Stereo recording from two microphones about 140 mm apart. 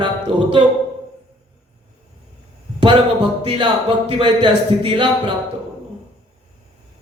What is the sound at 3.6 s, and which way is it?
A man's voice, 35° right (ahead or behind).